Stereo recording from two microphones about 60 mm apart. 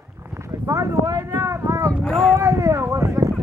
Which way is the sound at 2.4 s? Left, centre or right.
Right.